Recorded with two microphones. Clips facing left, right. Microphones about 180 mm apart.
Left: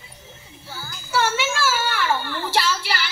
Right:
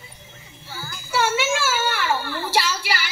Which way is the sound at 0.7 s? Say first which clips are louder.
Left 1 dB; 10° right (ahead or behind).